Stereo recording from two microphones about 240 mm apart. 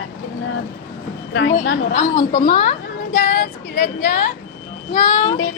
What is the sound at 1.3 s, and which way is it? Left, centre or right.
Speech, left.